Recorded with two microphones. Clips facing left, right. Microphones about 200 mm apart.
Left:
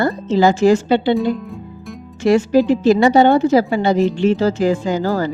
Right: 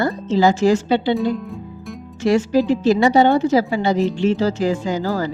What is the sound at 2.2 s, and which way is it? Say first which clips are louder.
Speech: left 3 dB; 55° left (ahead or behind).